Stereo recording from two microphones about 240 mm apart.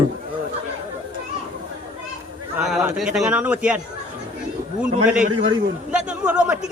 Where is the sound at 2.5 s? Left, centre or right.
Centre.